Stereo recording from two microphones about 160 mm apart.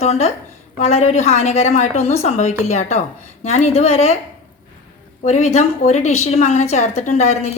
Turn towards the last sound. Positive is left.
turn(degrees=45)  # may be behind; listen again after turning